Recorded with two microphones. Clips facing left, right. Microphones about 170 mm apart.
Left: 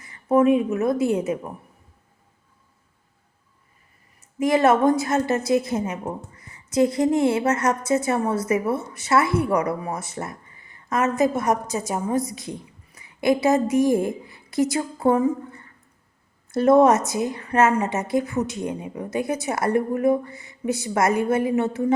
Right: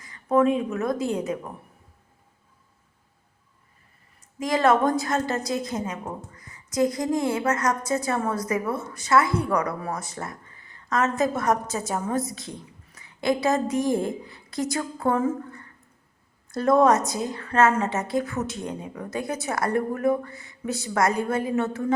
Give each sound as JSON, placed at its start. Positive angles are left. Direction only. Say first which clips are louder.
{"t": 0.3, "sound": "a woman's voice", "louder": "left 3 dB", "side_deg": 20}
{"t": 4.4, "sound": "a woman's voice", "louder": "left 3 dB", "side_deg": 25}